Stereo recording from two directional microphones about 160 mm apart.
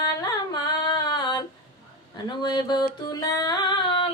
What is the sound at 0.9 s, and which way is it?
Female singing, 30° left (ahead or behind).